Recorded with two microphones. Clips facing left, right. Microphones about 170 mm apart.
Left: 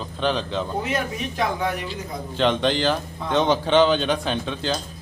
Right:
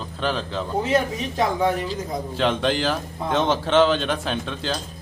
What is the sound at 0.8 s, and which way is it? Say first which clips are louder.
Speech: right 7 dB; 30° right (ahead or behind).